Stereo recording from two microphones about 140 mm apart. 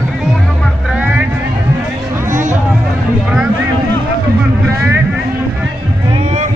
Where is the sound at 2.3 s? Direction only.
60° right (ahead or behind).